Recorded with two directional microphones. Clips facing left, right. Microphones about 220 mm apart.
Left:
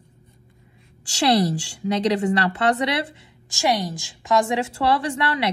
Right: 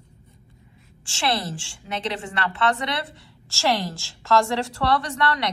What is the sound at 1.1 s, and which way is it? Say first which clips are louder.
A woman's voice: left 7 dB; 40° left (ahead or behind).